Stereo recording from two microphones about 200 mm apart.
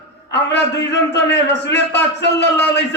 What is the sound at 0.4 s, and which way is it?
A man's voice, 60° left (ahead or behind).